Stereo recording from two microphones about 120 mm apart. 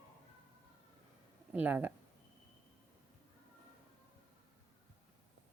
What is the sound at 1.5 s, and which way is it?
Speech, 15° right (ahead or behind).